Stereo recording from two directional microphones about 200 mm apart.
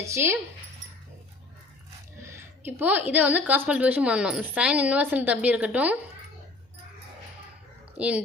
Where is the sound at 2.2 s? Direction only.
10° right (ahead or behind).